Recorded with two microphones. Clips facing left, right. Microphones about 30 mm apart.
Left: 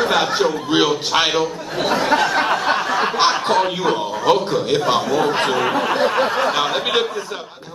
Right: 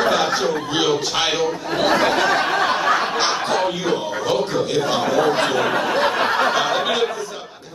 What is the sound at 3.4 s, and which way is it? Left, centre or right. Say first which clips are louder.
A man's voice: left 3 dB; left.